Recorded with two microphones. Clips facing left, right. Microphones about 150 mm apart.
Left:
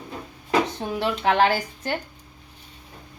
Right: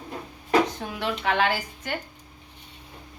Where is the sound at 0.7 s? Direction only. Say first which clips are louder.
Left 4 dB; 35° left (ahead or behind).